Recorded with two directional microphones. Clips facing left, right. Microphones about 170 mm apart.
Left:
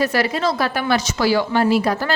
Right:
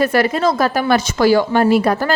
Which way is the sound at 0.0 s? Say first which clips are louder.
Right 4 dB; 50° right (ahead or behind).